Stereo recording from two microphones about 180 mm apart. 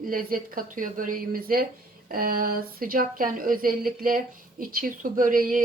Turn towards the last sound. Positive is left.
turn(degrees=-50)  # may be behind; listen again after turning